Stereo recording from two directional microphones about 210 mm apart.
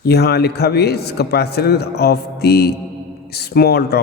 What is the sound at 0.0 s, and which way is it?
A man's voice, 50° left (ahead or behind).